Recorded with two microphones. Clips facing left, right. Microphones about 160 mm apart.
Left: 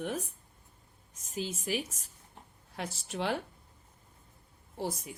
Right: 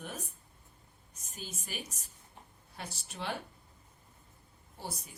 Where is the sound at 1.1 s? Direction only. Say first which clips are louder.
Left 10 dB; 90° left.